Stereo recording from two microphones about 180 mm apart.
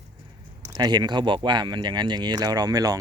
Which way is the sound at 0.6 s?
20° right (ahead or behind).